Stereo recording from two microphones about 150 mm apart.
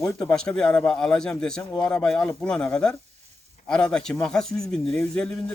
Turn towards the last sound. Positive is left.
turn(degrees=5)  # may be behind; listen again after turning